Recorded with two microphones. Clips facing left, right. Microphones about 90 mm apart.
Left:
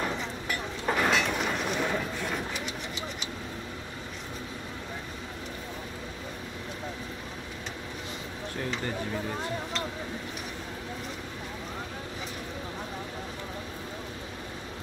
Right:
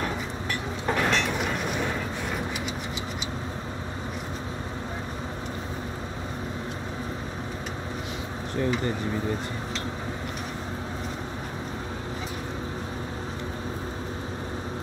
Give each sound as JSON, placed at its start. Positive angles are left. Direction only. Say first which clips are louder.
{"t": 0.0, "sound": "vehicle", "louder": "right 2 dB", "side_deg": 0}